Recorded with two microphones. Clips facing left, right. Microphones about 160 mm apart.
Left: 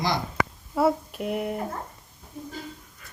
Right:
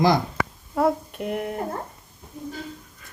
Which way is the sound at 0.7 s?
Centre (ahead or behind).